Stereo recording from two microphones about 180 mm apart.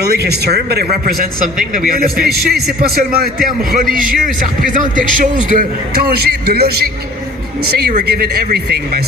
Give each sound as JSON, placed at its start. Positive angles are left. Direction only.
{"t": 0.0, "sound": "a man's voice", "side_deg": -60}
{"t": 4.7, "sound": "a man's voice", "side_deg": -45}